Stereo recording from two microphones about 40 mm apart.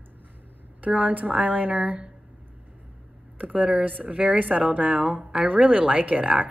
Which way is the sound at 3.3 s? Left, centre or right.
Right.